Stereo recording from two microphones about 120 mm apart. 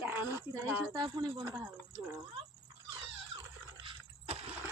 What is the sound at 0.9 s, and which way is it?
Speech, 35° right (ahead or behind).